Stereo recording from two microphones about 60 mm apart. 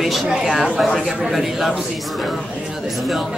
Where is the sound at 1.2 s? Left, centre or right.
Centre.